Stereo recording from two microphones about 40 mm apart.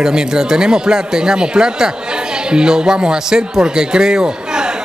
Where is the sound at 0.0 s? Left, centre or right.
Centre.